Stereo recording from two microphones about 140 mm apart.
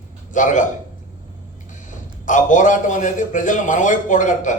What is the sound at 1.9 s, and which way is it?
A man's voice, 65° left (ahead or behind).